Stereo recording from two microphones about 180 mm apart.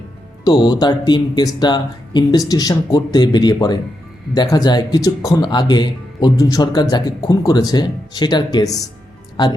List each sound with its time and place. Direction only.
0.4 s speech: 25° left (ahead or behind)